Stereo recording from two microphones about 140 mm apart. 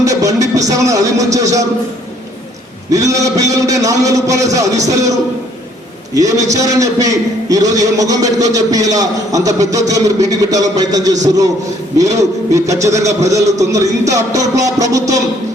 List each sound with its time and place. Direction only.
0.0 s speech: 25° right (ahead or behind)
2.9 s a man's voice: 25° right (ahead or behind)
6.1 s a man's voice: 25° right (ahead or behind)
12.1 s a man's voice: 20° right (ahead or behind)